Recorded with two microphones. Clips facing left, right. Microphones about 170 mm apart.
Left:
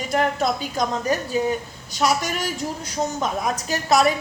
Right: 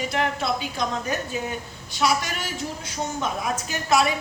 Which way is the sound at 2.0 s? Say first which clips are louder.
Left 2 dB; 45° left (ahead or behind).